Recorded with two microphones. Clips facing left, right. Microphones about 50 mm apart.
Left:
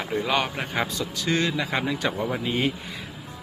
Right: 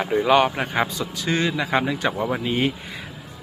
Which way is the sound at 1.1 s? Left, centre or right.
Centre.